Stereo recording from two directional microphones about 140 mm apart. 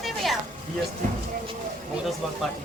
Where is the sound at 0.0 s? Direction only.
Centre (ahead or behind).